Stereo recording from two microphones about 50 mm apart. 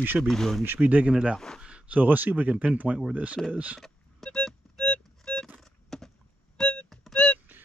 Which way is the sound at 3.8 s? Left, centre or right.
Centre.